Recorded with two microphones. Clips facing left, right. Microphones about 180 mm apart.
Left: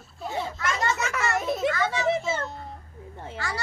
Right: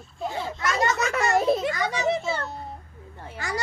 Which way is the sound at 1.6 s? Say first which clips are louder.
Left 1 dB; 15° right (ahead or behind).